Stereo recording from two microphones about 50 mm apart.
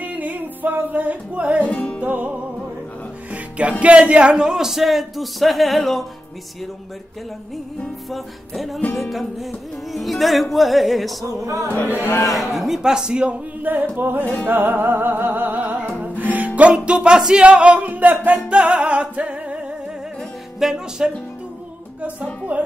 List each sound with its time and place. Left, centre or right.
0.0 s music: right
1.6 s music: left
2.0 s music: right; by 6.0 s centre
8.1 s music: centre
11.4 s music: right
12.0 s a man's voice: left
12.3 s a man's voice: centre
13.6 s music: right
20.5 s a man's voice: centre
22.0 s music: right